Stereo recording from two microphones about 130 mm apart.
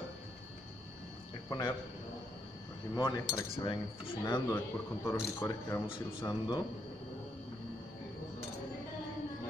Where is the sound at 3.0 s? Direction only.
35° left (ahead or behind).